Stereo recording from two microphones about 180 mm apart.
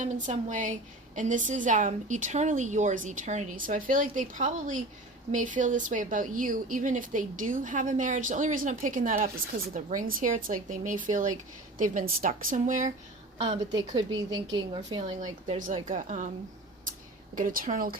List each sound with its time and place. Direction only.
0.0 s speech: 45° right (ahead or behind)
14.3 s a woman's voice: 25° right (ahead or behind)
15.2 s speech: 45° right (ahead or behind)
17.3 s speech: 50° right (ahead or behind)